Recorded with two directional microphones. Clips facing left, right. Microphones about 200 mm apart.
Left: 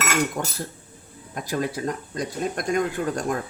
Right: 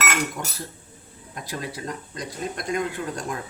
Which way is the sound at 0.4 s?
55° left (ahead or behind).